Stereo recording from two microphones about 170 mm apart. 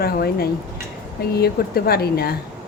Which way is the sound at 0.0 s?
65° left (ahead or behind).